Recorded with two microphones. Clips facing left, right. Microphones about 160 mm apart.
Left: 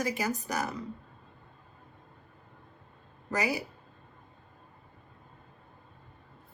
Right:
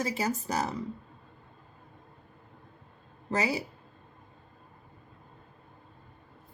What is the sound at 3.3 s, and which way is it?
Speech, 25° right (ahead or behind).